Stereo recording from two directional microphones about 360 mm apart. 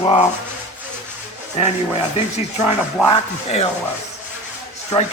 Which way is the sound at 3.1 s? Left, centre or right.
Centre.